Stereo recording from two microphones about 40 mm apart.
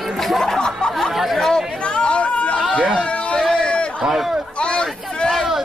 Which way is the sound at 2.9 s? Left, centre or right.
Left.